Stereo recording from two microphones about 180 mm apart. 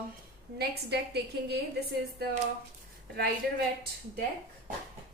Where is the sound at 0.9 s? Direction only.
65° right (ahead or behind).